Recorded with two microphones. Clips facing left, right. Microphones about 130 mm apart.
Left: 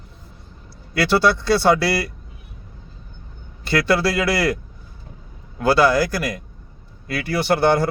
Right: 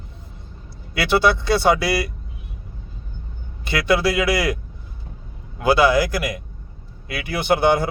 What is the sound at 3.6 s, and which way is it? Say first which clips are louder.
Speech: even; 15° right (ahead or behind).